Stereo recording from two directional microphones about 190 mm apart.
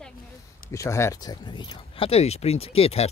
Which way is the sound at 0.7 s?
15° left (ahead or behind).